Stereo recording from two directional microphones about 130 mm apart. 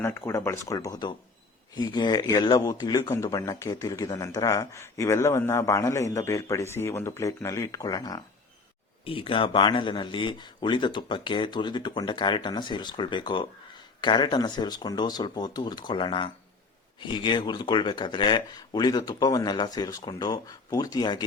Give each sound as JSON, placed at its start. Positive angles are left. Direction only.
{"t": 0.3, "sound": "speech", "side_deg": 20}
{"t": 9.0, "sound": "speech", "side_deg": 45}